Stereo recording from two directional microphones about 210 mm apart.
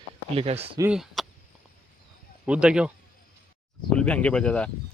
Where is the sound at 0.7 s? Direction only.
5° right (ahead or behind).